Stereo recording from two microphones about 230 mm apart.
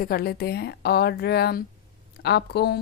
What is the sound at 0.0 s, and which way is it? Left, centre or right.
A woman's voice, left.